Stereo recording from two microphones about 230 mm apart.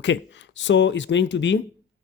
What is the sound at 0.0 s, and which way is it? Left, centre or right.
Speech, left.